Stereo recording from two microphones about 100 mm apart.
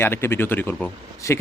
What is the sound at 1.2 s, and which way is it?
Speech, 30° left (ahead or behind).